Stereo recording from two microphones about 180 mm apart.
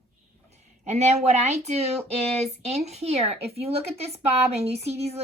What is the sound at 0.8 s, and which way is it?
A woman's voice, 40° right (ahead or behind).